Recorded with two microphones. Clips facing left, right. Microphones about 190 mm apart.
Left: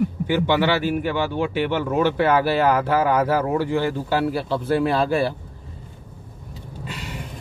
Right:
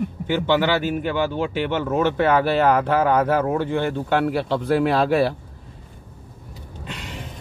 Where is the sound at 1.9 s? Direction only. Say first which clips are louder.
Even; 10° left (ahead or behind).